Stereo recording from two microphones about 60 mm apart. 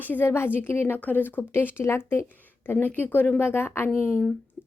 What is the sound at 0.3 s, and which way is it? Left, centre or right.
Speech, left.